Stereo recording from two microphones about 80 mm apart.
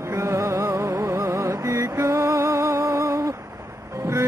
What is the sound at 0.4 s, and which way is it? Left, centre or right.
Music, right.